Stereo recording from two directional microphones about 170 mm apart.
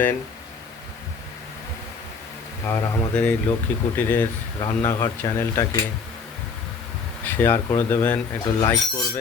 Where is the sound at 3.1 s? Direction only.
10° left (ahead or behind).